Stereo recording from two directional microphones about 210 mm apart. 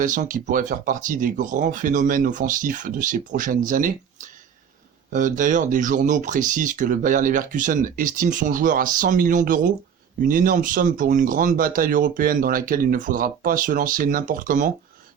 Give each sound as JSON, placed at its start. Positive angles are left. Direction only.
{"t": 0.0, "sound": "speech", "side_deg": -40}